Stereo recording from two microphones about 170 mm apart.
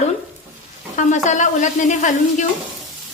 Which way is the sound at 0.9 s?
45° left (ahead or behind).